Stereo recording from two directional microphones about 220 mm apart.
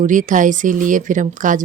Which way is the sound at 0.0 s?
35° right (ahead or behind).